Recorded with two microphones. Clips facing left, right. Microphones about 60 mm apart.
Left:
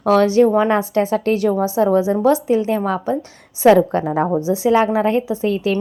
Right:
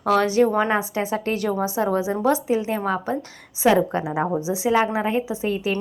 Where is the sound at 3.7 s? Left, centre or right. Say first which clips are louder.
Left 6 dB; centre.